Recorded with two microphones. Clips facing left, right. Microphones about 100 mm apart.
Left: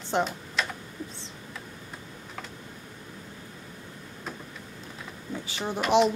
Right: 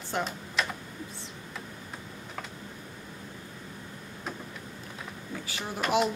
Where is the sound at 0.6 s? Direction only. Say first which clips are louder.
Even; centre (ahead or behind).